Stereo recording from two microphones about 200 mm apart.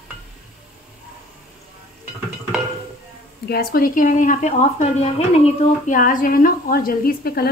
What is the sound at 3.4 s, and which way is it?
Speech, 50° left (ahead or behind).